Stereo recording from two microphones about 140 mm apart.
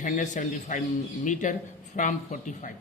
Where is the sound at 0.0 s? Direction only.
60° left (ahead or behind).